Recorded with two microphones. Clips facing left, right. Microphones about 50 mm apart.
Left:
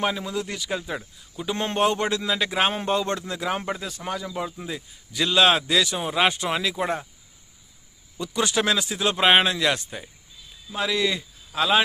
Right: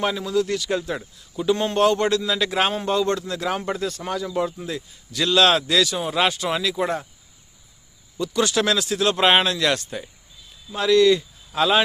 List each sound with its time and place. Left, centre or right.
0.0 s a man's voice: centre
1.5 s speech: left
2.7 s speech: left
3.7 s a man's voice: centre
8.2 s a man's voice: centre